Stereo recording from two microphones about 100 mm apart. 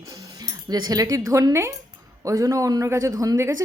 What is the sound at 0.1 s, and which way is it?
A woman's voice, 35° right (ahead or behind).